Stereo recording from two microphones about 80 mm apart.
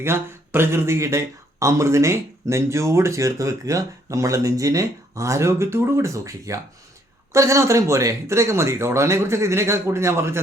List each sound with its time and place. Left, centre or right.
0.0 s speech: right